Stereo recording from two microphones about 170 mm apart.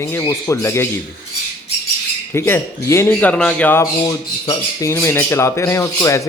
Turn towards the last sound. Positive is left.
turn(degrees=15)  # may be behind; listen again after turning